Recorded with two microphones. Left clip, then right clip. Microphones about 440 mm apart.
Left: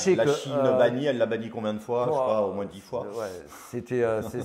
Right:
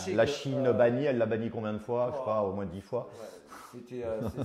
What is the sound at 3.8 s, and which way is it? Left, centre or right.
Speech, left.